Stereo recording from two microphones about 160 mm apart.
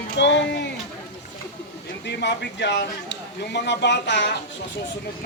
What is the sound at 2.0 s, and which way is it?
Speech, 90° left.